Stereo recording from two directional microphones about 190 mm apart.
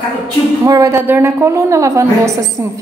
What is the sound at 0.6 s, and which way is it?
A woman's voice, 20° right (ahead or behind).